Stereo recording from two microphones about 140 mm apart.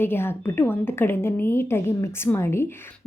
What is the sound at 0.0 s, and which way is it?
A woman's voice, 15° left (ahead or behind).